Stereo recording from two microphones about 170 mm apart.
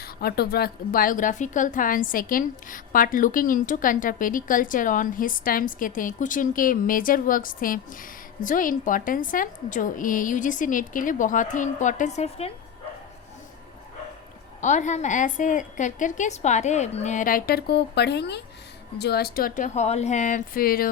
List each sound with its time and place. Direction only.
0.0 s a woman's voice: 65° left (ahead or behind); by 12.5 s 40° left (ahead or behind)
14.6 s a woman's voice: 45° left (ahead or behind); by 18.4 s 80° left
18.9 s speech: 70° left (ahead or behind)